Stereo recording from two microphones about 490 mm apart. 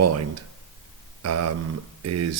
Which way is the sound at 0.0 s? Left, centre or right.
Right.